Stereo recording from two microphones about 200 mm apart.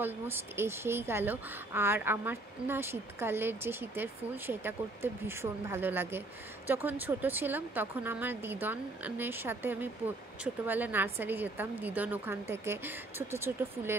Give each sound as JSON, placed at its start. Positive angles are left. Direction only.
{"t": 0.0, "sound": "speech", "side_deg": -10}